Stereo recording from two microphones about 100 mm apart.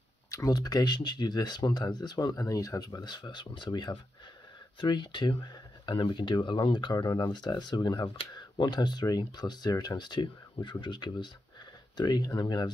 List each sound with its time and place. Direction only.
0.3 s speech: 35° left (ahead or behind)